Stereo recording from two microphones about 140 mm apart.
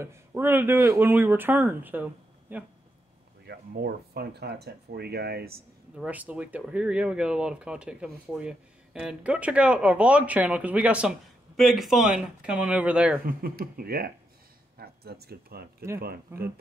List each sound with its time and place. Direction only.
0.0 s speech: 20° right (ahead or behind)
3.7 s speech: 90° right
5.3 s speech: 90° right
5.9 s speech: 10° right (ahead or behind)
13.2 s speech: 90° right
14.8 s a sound: 90° right
15.5 s speech: 90° right